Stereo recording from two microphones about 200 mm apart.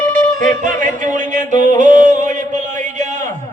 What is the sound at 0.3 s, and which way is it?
Yodeling, 40° right (ahead or behind).